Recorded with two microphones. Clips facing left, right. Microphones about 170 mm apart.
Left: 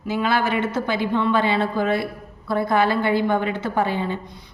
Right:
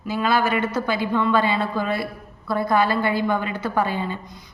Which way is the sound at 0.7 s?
20° left (ahead or behind).